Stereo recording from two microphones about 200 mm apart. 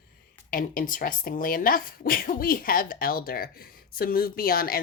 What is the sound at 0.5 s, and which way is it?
Speech, 45° left (ahead or behind).